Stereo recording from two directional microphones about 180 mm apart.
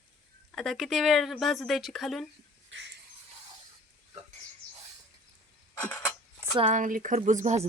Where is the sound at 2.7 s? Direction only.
90° right.